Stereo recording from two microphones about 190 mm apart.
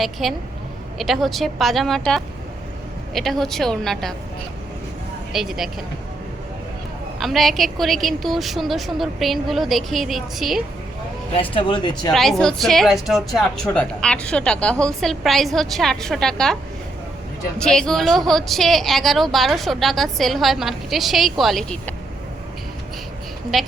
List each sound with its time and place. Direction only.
0.0 s speech: centre (ahead or behind)
5.3 s speech: centre (ahead or behind)
7.2 s speech: centre (ahead or behind)
11.3 s speech: 25° left (ahead or behind)
12.1 s speech: centre (ahead or behind)
17.6 s speech: 5° left (ahead or behind)
23.5 s speech: centre (ahead or behind)